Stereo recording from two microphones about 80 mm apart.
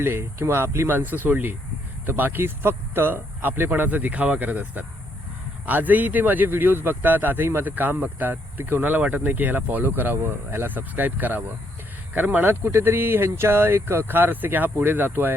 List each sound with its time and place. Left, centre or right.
0.0 s a man's voice: right